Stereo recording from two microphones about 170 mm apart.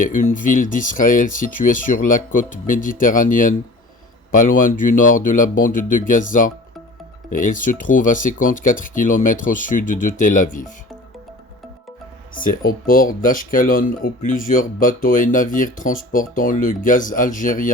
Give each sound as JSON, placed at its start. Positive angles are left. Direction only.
{"t": 0.0, "sound": "speech", "side_deg": 50}
{"t": 12.4, "sound": "speech", "side_deg": 55}